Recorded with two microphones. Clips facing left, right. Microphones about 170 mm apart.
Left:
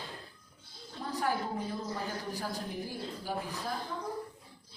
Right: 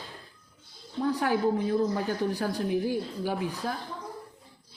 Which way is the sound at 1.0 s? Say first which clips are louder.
Right 8 dB; 70° right (ahead or behind).